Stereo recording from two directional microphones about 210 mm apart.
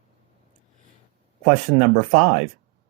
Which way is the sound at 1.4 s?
30° right (ahead or behind).